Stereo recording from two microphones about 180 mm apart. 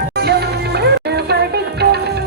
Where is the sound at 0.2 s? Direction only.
65° right (ahead or behind).